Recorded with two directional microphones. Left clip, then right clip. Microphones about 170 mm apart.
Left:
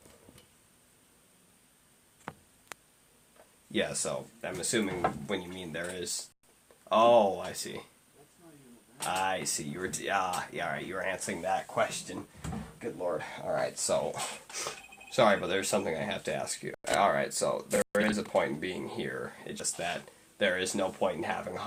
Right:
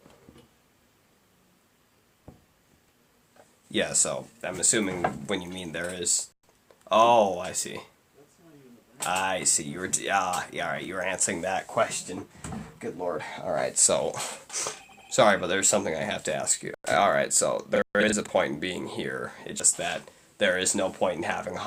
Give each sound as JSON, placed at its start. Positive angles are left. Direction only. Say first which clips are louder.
{"t": 3.7, "sound": "speech", "louder": "right 5 dB", "side_deg": -25}
{"t": 9.0, "sound": "speech", "louder": "right 4 dB", "side_deg": -30}
{"t": 13.1, "sound": "speech", "louder": "right 3 dB", "side_deg": -55}
{"t": 14.1, "sound": "speech", "louder": "right 4 dB", "side_deg": -30}